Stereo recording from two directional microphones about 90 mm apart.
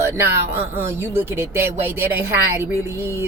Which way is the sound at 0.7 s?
30° right (ahead or behind).